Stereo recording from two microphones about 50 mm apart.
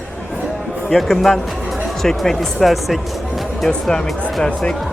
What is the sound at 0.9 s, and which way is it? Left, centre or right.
Speech, centre.